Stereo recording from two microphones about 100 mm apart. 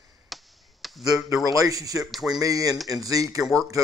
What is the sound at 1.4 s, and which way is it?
Speech, 35° right (ahead or behind).